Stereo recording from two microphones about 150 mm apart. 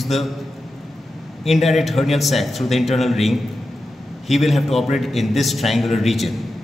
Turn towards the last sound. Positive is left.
turn(degrees=0)  # may be behind; listen again after turning